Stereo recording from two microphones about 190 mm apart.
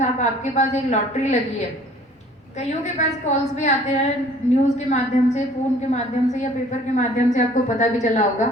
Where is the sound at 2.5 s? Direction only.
35° left (ahead or behind).